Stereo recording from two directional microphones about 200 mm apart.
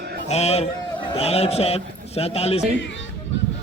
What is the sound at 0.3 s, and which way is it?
A man's voice, 35° left (ahead or behind).